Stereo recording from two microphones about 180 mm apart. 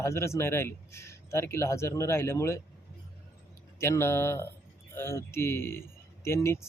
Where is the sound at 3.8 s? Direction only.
15° left (ahead or behind).